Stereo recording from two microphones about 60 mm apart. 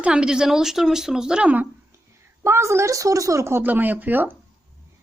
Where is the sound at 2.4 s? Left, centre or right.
Right.